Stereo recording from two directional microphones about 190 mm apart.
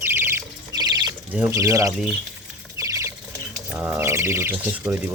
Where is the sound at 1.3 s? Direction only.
10° right (ahead or behind).